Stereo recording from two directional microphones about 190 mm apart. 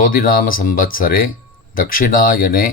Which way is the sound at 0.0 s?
50° left (ahead or behind).